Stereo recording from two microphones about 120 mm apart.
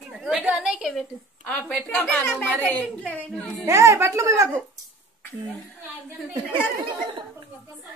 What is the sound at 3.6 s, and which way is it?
Speech, 25° right (ahead or behind).